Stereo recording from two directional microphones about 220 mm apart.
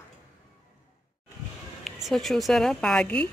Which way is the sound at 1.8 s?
Centre (ahead or behind).